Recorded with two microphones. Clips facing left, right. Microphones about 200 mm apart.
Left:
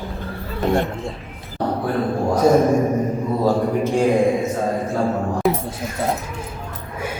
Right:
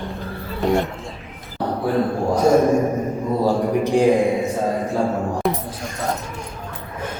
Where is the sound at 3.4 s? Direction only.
15° right (ahead or behind).